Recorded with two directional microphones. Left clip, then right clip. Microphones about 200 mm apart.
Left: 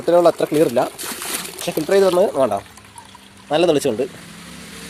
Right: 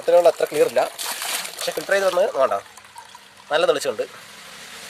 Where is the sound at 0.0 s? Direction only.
Centre (ahead or behind).